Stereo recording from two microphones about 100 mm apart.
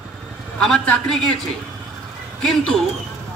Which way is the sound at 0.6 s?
5° left (ahead or behind).